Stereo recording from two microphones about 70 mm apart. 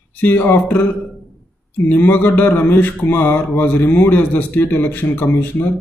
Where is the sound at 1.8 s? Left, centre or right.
Left.